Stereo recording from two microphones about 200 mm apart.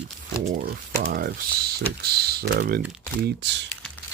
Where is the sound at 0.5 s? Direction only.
45° right (ahead or behind).